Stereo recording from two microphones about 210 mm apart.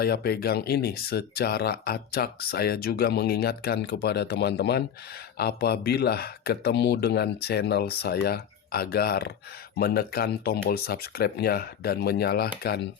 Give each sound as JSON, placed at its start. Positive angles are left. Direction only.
{"t": 0.0, "sound": "speech", "side_deg": 45}